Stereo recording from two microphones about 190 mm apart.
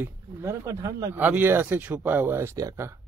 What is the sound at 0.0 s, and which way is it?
Speech, 15° right (ahead or behind).